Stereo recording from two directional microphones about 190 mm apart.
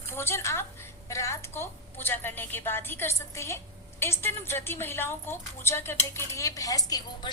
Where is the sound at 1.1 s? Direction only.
15° left (ahead or behind).